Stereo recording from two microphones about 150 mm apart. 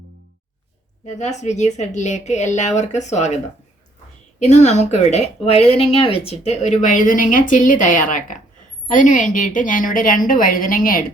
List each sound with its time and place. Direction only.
1.0 s speech: 50° left (ahead or behind)
4.4 s a woman's voice: 50° left (ahead or behind); by 11.0 s 70° left (ahead or behind)